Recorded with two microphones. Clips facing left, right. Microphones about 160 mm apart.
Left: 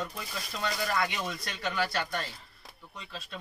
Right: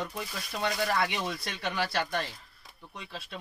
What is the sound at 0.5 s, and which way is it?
Speech, 20° right (ahead or behind).